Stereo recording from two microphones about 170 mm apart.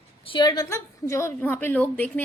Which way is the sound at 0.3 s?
25° left (ahead or behind).